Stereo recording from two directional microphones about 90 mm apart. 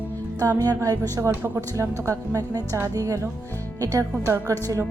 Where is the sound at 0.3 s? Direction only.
40° right (ahead or behind).